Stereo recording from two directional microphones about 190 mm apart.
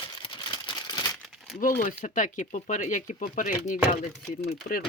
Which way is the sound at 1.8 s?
45° left (ahead or behind).